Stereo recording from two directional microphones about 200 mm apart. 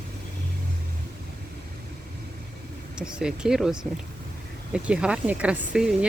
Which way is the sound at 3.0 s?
5° right (ahead or behind).